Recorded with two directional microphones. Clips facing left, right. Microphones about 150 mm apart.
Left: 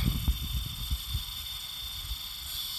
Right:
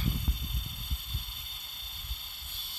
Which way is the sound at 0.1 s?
20° right (ahead or behind).